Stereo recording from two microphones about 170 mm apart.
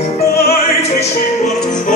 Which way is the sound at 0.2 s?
65° left (ahead or behind).